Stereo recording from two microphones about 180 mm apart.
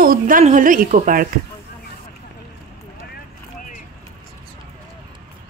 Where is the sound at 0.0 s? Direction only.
50° right (ahead or behind).